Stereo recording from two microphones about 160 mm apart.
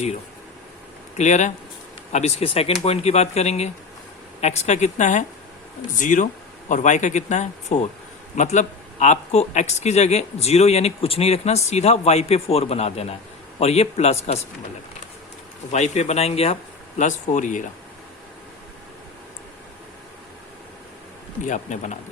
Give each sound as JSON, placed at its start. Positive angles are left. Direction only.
{"t": 1.2, "sound": "speech", "side_deg": 45}
{"t": 15.7, "sound": "speech", "side_deg": 45}
{"t": 17.0, "sound": "speech", "side_deg": 50}
{"t": 21.4, "sound": "speech", "side_deg": 50}